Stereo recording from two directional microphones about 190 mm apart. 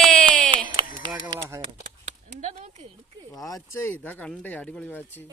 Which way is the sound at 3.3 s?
20° left (ahead or behind).